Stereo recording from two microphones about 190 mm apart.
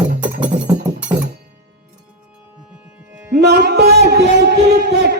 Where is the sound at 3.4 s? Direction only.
60° right (ahead or behind).